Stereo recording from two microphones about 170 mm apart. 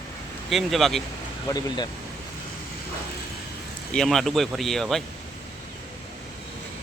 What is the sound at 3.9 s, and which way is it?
Speech, centre (ahead or behind).